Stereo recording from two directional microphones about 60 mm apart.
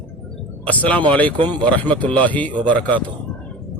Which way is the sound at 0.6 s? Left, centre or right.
Left.